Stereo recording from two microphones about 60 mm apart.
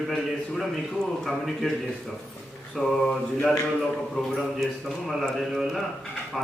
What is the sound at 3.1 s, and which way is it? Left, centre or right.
Mantra, centre.